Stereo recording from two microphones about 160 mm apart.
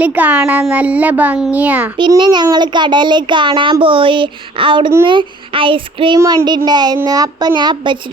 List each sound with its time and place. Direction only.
0.0 s a child's voice: 10° right (ahead or behind)
2.0 s a child's voice: 25° right (ahead or behind)
5.0 s child singing: 30° right (ahead or behind)
6.1 s a child's voice: 25° right (ahead or behind)